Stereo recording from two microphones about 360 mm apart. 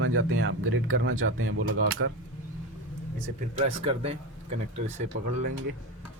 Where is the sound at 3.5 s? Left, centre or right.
Centre.